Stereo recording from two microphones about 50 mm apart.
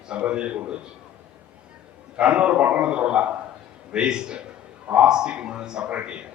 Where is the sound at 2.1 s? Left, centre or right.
Right.